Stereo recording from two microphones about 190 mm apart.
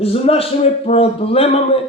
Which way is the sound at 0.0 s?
30° left (ahead or behind).